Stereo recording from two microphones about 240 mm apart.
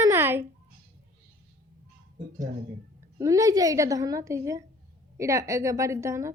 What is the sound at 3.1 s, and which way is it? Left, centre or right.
A woman's voice, centre.